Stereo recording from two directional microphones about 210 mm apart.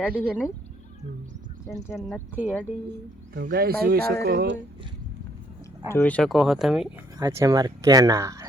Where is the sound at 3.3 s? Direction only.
45° right (ahead or behind).